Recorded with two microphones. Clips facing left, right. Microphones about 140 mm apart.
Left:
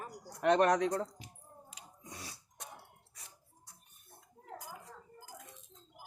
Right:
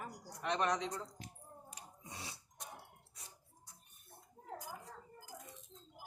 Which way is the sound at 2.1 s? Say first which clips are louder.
Left 1 dB; 25° right (ahead or behind).